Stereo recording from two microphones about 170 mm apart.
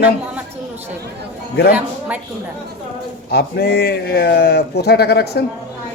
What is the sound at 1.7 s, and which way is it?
Speech, 10° right (ahead or behind).